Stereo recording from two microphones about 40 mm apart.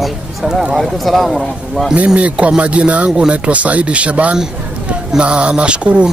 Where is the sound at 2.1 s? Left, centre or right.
Right.